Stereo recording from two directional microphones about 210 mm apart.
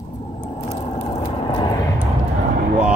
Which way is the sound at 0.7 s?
30° left (ahead or behind).